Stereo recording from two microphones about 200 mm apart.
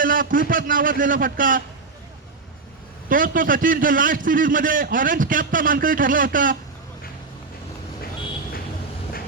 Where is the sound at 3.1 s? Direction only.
45° right (ahead or behind).